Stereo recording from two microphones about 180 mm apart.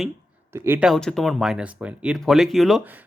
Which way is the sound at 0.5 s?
15° right (ahead or behind).